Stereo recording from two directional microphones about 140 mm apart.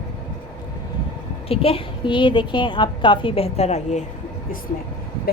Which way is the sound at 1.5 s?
45° left (ahead or behind).